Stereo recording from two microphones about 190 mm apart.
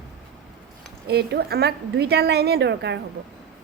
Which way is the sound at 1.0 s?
55° right (ahead or behind).